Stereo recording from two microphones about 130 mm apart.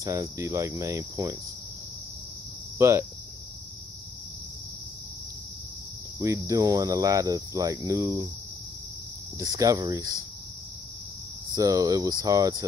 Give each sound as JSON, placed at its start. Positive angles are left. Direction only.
{"t": 0.0, "sound": "cricket", "side_deg": -25}
{"t": 2.8, "sound": "cricket", "side_deg": -20}
{"t": 6.1, "sound": "cricket", "side_deg": -25}
{"t": 9.4, "sound": "cricket", "side_deg": -25}
{"t": 11.5, "sound": "cricket", "side_deg": -25}